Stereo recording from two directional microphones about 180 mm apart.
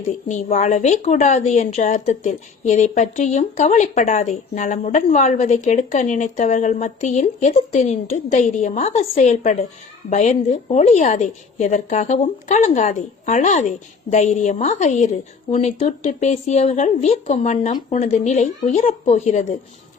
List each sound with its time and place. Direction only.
0.3 s a woman's voice: 40° left (ahead or behind)